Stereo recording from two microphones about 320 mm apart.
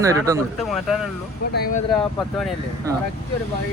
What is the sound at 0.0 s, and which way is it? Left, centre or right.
Speech, centre.